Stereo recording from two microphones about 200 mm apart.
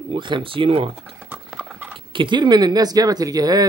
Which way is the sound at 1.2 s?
5° right (ahead or behind).